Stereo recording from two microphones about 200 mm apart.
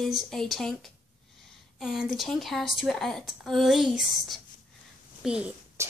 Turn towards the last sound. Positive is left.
turn(degrees=-5)  # may be behind; listen again after turning